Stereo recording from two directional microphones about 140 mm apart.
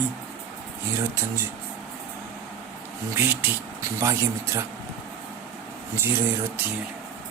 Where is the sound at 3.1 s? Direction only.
15° right (ahead or behind).